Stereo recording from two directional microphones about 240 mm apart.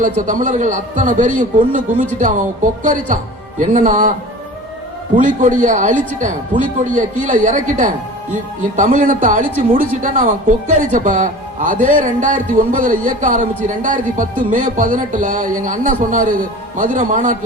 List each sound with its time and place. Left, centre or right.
0.2 s speech: right
5.2 s speech: right